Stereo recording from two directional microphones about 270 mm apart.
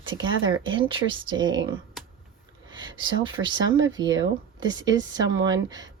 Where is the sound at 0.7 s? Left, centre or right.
Centre.